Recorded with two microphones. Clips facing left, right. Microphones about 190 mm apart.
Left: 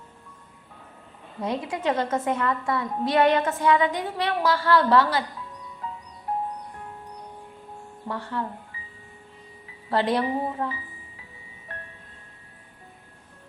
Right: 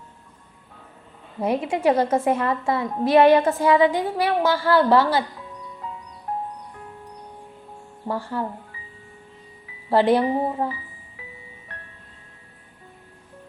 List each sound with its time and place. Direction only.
1.4 s a woman's voice: 25° right (ahead or behind)
8.0 s speech: 30° right (ahead or behind)
9.9 s a woman's voice: 30° right (ahead or behind)